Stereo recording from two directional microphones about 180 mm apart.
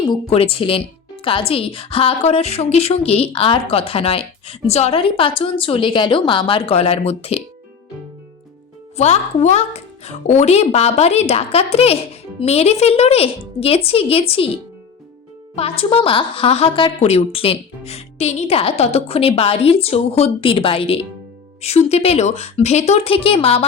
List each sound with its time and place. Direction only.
0.3 s a woman's voice: 30° left (ahead or behind)
9.0 s a woman's voice: 40° left (ahead or behind)
15.5 s a woman's voice: 30° left (ahead or behind)